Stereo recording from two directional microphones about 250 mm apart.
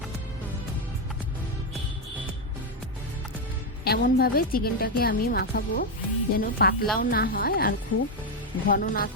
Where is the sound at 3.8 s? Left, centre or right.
Left.